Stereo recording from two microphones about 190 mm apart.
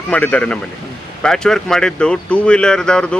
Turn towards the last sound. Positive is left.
turn(degrees=5)  # may be behind; listen again after turning